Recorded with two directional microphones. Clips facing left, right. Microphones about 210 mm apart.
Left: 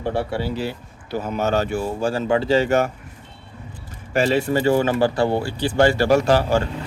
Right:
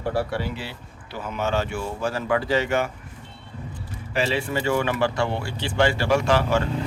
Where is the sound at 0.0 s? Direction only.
25° left (ahead or behind); by 2.9 s 40° left (ahead or behind).